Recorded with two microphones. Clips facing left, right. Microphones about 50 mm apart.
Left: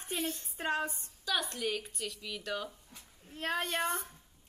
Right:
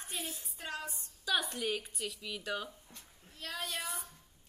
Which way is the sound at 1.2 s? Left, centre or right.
Centre.